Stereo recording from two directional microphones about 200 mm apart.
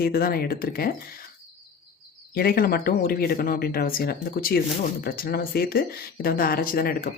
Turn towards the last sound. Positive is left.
turn(degrees=45)  # may be behind; listen again after turning